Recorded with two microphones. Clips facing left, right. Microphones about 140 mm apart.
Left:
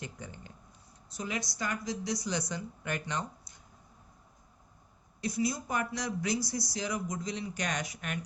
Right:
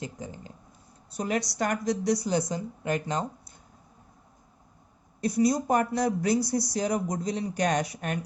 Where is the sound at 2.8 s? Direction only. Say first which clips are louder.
Right 7 dB; 30° right (ahead or behind).